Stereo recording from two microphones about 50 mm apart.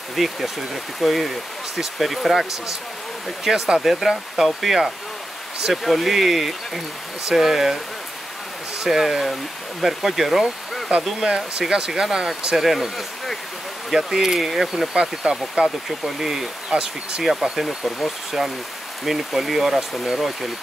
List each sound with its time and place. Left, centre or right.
0.1 s speech: centre
3.4 s speech: centre
8.8 s speech: centre
11.2 s speech: centre
12.5 s speech: centre
15.0 s speech: centre